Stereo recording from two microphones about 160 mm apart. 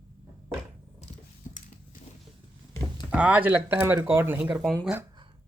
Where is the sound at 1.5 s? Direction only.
50° left (ahead or behind).